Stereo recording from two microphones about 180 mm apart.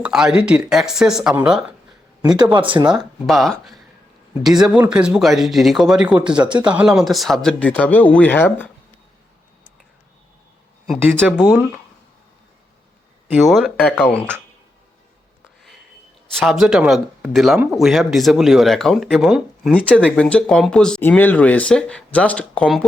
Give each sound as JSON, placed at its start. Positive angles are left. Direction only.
{"t": 0.0, "sound": "speech", "side_deg": -5}
{"t": 2.2, "sound": "speech", "side_deg": -25}
{"t": 2.9, "sound": "speech", "side_deg": 0}
{"t": 13.3, "sound": "speech", "side_deg": 0}
{"t": 16.3, "sound": "speech", "side_deg": 0}